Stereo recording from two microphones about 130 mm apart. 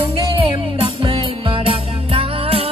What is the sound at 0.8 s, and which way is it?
Music, 45° right (ahead or behind).